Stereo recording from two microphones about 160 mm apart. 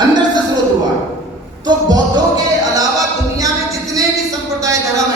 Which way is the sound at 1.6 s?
25° right (ahead or behind).